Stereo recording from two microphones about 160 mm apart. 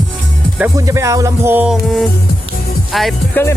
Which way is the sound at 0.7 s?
20° right (ahead or behind).